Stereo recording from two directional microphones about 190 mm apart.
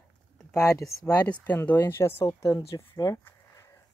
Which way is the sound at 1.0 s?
5° left (ahead or behind).